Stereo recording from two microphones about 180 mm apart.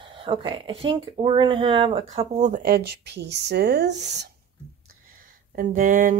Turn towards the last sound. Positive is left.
turn(degrees=-45)  # may be behind; listen again after turning